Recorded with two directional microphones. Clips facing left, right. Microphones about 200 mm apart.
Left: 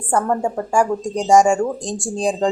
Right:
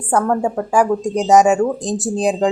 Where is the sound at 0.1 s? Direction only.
Centre (ahead or behind).